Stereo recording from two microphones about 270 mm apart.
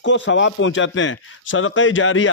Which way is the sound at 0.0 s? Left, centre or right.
Left.